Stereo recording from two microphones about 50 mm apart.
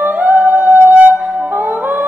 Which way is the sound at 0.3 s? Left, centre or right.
Right.